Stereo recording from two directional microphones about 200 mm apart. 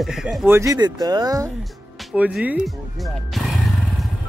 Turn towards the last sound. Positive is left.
turn(degrees=0)  # may be behind; listen again after turning